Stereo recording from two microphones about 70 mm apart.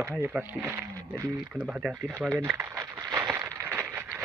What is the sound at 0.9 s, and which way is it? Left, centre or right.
Speech, right.